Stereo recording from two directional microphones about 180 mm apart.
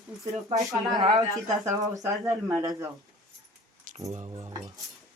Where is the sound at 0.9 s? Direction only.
20° right (ahead or behind).